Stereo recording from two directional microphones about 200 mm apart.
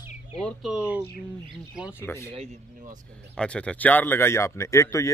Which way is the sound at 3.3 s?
5° left (ahead or behind).